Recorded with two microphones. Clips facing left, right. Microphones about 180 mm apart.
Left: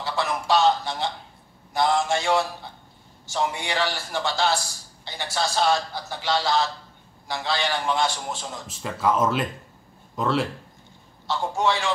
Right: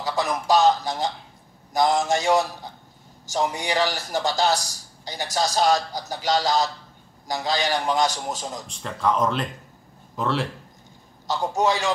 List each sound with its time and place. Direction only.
0.3 s a sound: 40° right (ahead or behind)
1.7 s a man's voice: 40° right (ahead or behind)
8.6 s speech: 5° left (ahead or behind)
11.2 s a man's voice: 40° right (ahead or behind)